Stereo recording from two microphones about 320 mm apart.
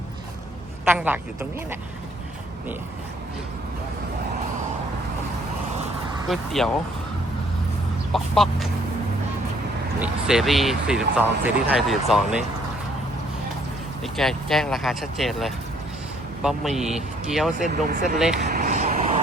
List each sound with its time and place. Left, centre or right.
0.9 s speech: centre
6.2 s speech: centre
8.1 s speech: centre
10.0 s speech: centre
14.0 s speech: centre
17.8 s speech: right
18.3 s a sound: right